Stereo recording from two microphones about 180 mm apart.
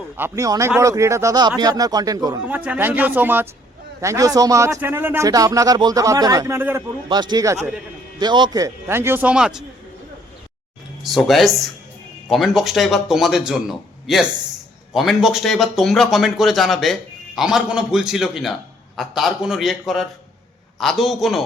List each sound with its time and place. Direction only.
0.2 s speech: 20° right (ahead or behind)
7.1 s speech: 25° right (ahead or behind); by 9.6 s 5° right (ahead or behind)
11.0 s speech: centre (ahead or behind)